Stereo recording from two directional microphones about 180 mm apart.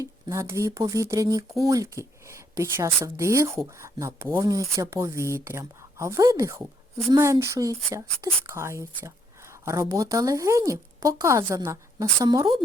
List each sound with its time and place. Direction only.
0.0 s speech: 15° right (ahead or behind)